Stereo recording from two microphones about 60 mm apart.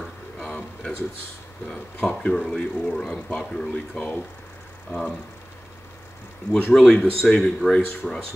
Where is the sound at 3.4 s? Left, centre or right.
Centre.